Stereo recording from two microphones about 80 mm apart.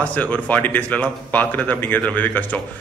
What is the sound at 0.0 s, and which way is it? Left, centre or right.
Speech, centre.